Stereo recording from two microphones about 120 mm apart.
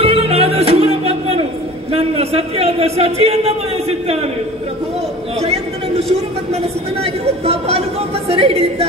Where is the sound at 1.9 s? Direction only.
55° right (ahead or behind).